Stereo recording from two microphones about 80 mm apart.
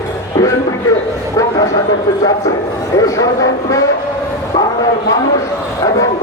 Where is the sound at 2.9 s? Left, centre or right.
Left.